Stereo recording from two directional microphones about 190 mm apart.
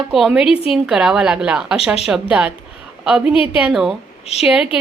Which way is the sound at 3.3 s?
30° left (ahead or behind).